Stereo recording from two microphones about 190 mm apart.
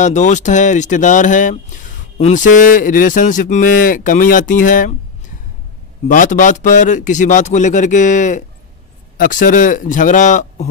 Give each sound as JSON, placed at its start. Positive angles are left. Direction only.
{"t": 0.0, "sound": "speech", "side_deg": 40}
{"t": 6.0, "sound": "a man's voice", "side_deg": 40}